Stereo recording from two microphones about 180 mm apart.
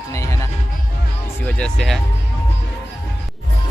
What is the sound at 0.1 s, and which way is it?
Music, 15° left (ahead or behind).